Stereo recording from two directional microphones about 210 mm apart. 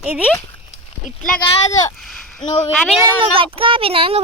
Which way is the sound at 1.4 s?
15° left (ahead or behind).